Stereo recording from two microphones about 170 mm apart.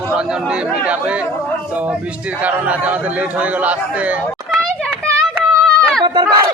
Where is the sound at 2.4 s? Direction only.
10° right (ahead or behind).